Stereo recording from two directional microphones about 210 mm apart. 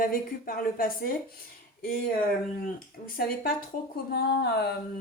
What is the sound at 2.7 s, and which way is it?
Speech, 45° left (ahead or behind).